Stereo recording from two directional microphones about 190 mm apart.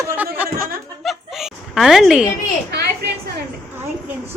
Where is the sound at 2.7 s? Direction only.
60° right (ahead or behind).